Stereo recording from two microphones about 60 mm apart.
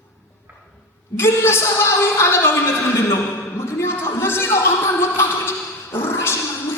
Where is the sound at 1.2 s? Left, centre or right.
Left.